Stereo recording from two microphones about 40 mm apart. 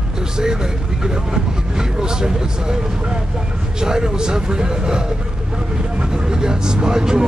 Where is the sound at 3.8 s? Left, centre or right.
Centre.